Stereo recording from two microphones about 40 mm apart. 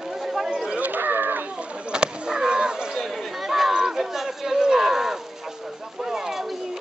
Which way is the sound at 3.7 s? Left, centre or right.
Centre.